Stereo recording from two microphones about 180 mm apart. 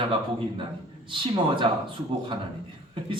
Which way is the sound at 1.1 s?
25° right (ahead or behind).